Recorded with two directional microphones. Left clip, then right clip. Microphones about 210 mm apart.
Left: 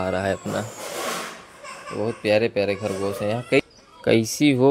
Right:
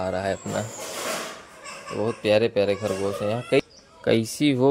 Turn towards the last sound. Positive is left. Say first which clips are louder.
# left 3 dB
turn(degrees=5)  # may be behind; listen again after turning